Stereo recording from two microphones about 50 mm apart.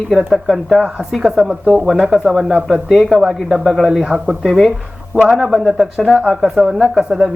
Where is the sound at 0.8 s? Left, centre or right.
Right.